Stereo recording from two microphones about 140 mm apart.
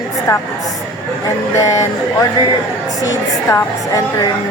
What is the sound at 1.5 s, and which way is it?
Speech, 20° left (ahead or behind).